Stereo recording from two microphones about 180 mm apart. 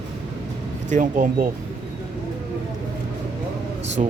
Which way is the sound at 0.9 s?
45° right (ahead or behind).